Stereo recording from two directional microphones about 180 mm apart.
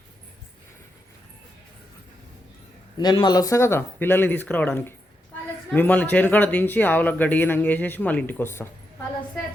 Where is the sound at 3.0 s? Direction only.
25° left (ahead or behind).